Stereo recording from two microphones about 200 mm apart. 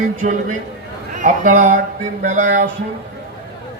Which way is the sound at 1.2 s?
40° right (ahead or behind).